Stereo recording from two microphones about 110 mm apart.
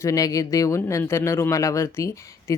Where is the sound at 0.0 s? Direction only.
30° left (ahead or behind).